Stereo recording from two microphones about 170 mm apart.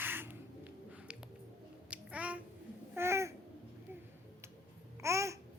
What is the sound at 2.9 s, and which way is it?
Babbling, 15° right (ahead or behind).